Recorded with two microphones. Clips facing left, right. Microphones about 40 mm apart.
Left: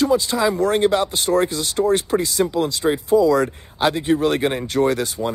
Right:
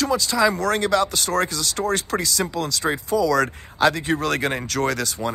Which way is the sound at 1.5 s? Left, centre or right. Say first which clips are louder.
Left 2 dB; left.